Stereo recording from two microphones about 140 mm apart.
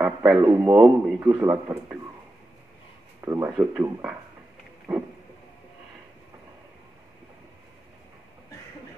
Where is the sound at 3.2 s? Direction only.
20° right (ahead or behind).